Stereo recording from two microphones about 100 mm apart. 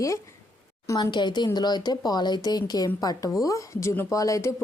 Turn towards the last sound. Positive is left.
turn(degrees=30)  # may be behind; listen again after turning